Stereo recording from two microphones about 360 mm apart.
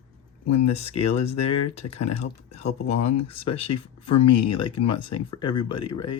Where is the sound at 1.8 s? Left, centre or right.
Left.